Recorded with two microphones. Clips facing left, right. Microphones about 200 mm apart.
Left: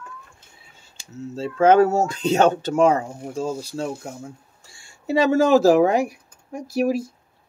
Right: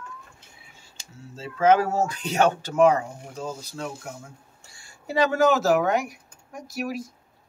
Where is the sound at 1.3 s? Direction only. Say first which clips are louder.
Left 5 dB; 30° left (ahead or behind).